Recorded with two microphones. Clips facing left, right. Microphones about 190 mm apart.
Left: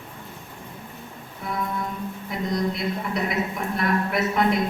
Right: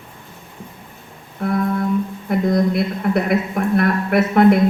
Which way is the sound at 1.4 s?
60° right (ahead or behind).